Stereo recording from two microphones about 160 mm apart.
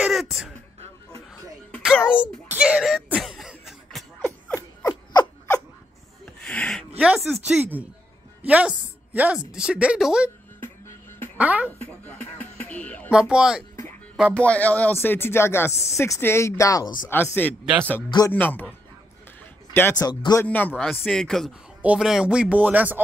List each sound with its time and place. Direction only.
0.0 s throat clearing: centre (ahead or behind)
1.3 s music: 5° left (ahead or behind)
2.5 s cough: 5° right (ahead or behind)
6.2 s rub: 5° left (ahead or behind)
7.0 s a woman's voice: 5° right (ahead or behind)
11.3 s speech: 10° right (ahead or behind)
11.8 s a sound: 10° left (ahead or behind)
13.1 s speech: 5° right (ahead or behind)
14.3 s speech: 10° left (ahead or behind)
20.0 s speech: 25° left (ahead or behind)
20.4 s speech: 10° left (ahead or behind); by 23.0 s 10° right (ahead or behind)